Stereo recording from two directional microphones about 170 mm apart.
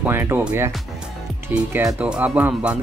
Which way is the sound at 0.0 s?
15° right (ahead or behind).